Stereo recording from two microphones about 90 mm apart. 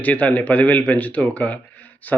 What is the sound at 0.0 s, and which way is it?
Speech, 15° left (ahead or behind).